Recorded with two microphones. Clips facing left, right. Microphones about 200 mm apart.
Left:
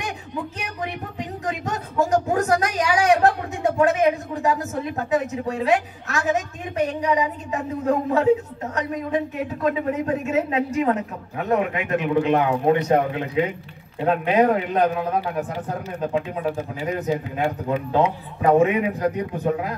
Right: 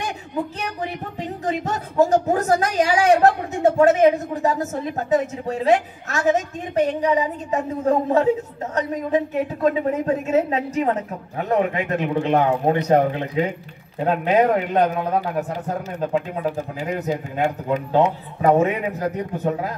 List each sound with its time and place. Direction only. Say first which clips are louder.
1.4 s speech: right 4 dB; 35° right (ahead or behind)
17.1 s speech: right 2 dB; 40° right (ahead or behind)